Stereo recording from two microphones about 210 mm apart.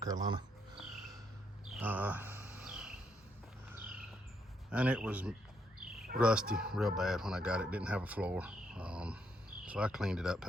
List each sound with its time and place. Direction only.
0.0 s speech: 20° right (ahead or behind)
1.7 s a sound: 10° right (ahead or behind)
4.7 s speech: 5° right (ahead or behind)